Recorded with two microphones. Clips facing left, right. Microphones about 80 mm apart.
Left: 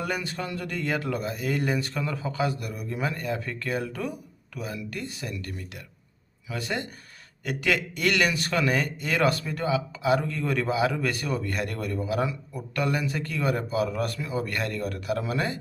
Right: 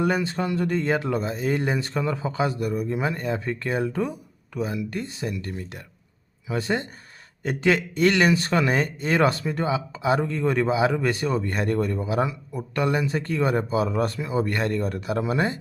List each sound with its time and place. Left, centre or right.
0.0 s speech: right